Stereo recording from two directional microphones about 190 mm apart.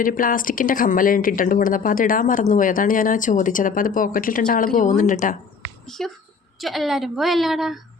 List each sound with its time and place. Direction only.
0.0 s speech: 45° left (ahead or behind)
5.8 s a woman's voice: centre (ahead or behind)